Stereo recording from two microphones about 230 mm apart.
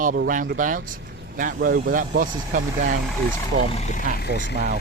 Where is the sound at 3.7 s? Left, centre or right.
Left.